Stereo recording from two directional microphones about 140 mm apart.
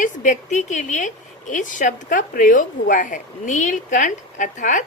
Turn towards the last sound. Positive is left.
turn(degrees=65)  # may be behind; listen again after turning